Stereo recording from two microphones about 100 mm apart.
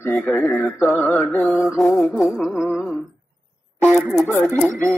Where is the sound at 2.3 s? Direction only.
10° right (ahead or behind).